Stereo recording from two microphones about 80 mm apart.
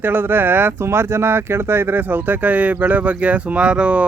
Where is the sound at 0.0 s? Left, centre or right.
Right.